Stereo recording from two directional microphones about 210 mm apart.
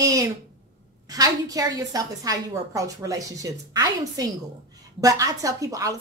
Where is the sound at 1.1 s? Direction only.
15° right (ahead or behind).